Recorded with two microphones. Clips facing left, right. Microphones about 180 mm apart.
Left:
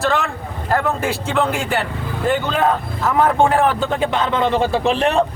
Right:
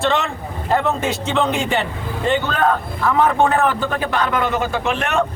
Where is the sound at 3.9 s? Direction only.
20° left (ahead or behind).